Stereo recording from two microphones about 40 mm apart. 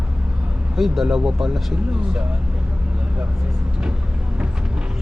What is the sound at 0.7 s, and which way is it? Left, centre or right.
Speech, centre.